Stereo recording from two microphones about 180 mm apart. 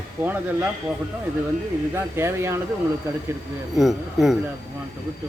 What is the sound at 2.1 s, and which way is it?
Speech, 15° right (ahead or behind).